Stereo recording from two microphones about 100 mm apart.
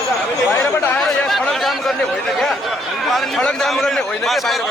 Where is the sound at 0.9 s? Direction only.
Centre (ahead or behind).